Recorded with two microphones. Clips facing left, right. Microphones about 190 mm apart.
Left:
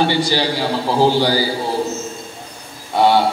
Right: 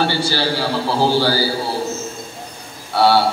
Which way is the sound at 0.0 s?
15° left (ahead or behind).